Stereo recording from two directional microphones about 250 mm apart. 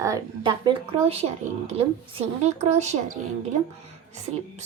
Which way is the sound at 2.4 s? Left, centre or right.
Right.